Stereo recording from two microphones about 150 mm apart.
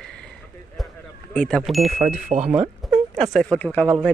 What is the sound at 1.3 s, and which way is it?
Speech, 5° left (ahead or behind).